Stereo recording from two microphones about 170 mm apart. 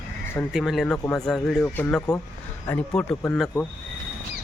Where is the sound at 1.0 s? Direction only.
20° left (ahead or behind).